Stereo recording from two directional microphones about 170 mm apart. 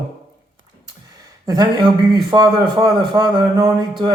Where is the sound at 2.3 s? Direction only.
20° right (ahead or behind).